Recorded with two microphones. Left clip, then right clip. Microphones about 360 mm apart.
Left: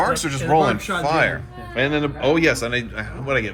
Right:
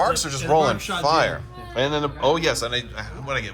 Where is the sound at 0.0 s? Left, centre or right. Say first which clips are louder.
Left 1 dB; centre.